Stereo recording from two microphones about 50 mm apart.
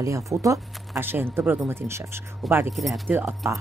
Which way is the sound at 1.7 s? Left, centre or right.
Right.